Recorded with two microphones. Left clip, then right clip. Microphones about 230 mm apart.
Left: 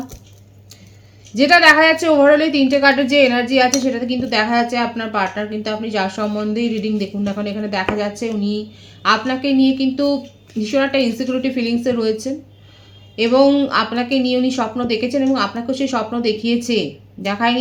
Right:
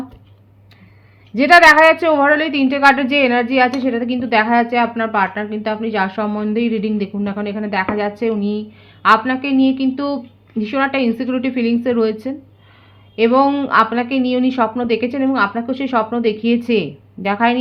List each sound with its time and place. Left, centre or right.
1.4 s a woman's voice: right